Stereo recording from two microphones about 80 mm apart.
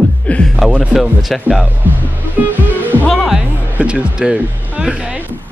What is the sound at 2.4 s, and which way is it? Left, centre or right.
Music, right.